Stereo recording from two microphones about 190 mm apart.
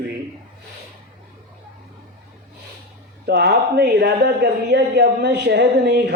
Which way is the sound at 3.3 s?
60° right (ahead or behind).